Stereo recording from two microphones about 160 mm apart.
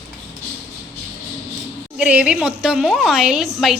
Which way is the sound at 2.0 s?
5° right (ahead or behind).